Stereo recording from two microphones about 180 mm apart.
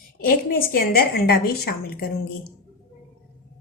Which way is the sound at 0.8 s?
55° left (ahead or behind).